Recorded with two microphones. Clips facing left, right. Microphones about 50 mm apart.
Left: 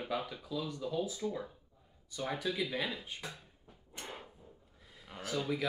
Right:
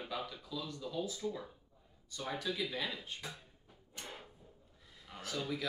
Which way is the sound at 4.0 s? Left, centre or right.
Centre.